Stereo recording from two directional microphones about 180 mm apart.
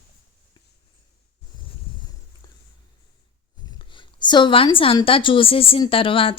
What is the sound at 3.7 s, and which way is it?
A woman's voice, 25° left (ahead or behind).